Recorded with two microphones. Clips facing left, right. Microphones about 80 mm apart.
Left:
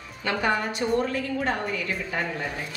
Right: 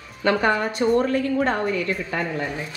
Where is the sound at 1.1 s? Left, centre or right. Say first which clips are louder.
Right 6 dB; right.